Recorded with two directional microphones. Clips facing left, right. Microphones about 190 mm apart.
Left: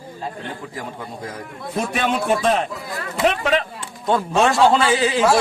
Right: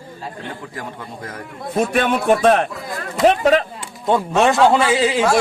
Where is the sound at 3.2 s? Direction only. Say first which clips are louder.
Right 5 dB; 40° right (ahead or behind).